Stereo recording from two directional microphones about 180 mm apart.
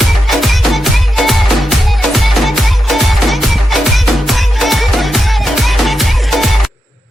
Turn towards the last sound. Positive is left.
turn(degrees=0)  # may be behind; listen again after turning